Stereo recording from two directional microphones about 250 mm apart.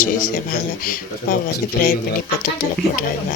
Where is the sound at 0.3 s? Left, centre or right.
Left.